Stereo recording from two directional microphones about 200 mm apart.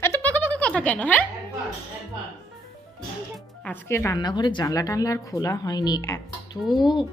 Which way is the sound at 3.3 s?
10° left (ahead or behind).